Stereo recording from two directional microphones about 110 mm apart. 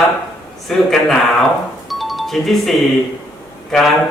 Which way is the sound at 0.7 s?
5° left (ahead or behind).